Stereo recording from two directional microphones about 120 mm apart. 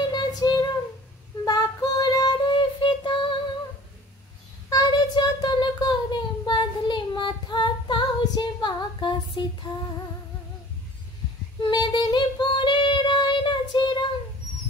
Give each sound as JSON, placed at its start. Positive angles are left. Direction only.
{"t": 0.4, "sound": "child singing", "side_deg": 35}
{"t": 4.6, "sound": "a sound", "side_deg": 35}
{"t": 11.7, "sound": "child singing", "side_deg": 35}